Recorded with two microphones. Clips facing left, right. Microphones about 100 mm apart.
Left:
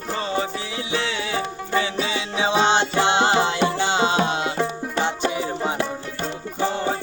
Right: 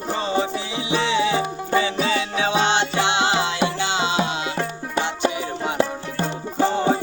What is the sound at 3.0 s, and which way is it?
Music, 45° left (ahead or behind).